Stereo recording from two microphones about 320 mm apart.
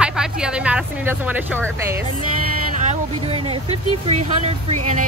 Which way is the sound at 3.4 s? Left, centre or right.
Centre.